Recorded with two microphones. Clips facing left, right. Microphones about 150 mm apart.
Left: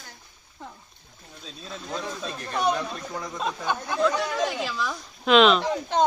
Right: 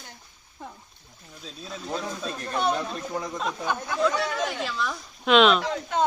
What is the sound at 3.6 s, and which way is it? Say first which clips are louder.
Speech: left 1 dB; 15° left (ahead or behind).